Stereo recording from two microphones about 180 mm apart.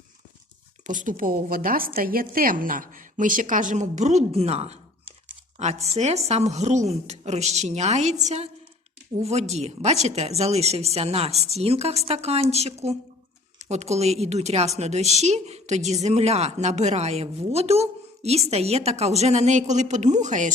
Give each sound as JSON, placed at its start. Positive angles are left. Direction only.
{"t": 0.9, "sound": "a woman's voice", "side_deg": -45}